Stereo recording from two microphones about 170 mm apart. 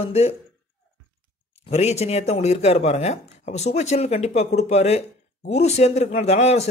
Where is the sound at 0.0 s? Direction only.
35° left (ahead or behind).